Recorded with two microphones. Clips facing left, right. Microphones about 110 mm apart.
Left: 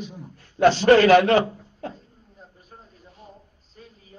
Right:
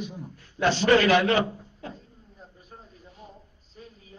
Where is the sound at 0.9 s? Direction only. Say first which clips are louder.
Left 5 dB; 45° left (ahead or behind).